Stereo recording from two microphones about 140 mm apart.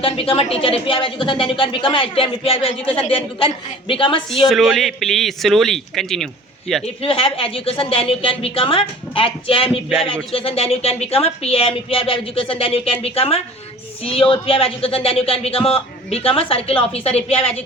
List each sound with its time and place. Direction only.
0.0 s a woman's voice: 40° left (ahead or behind)
4.4 s a man's voice: centre (ahead or behind)
6.8 s a woman's voice: 40° left (ahead or behind)